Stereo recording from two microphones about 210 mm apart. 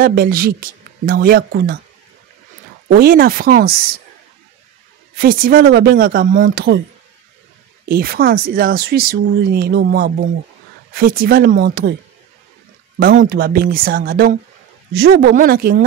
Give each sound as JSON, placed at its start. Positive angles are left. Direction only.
{"t": 0.0, "sound": "speech", "side_deg": -45}
{"t": 2.9, "sound": "speech", "side_deg": -45}
{"t": 5.1, "sound": "speech", "side_deg": -45}
{"t": 7.9, "sound": "speech", "side_deg": -45}
{"t": 13.0, "sound": "speech", "side_deg": -40}